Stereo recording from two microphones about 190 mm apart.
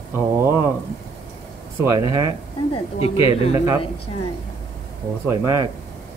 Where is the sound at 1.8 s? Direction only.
20° right (ahead or behind).